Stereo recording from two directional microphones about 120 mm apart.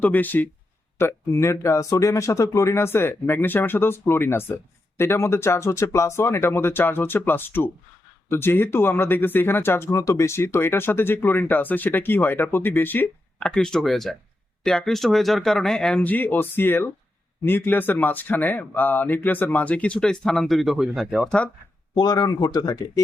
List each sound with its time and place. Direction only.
0.0 s speech: 15° left (ahead or behind); by 21.3 s centre (ahead or behind)
21.9 s speech: 35° left (ahead or behind)